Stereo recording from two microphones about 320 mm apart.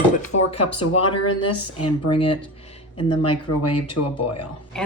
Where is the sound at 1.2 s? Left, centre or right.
Left.